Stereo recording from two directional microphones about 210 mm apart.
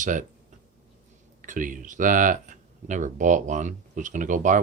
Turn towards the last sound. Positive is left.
turn(degrees=-40)  # may be behind; listen again after turning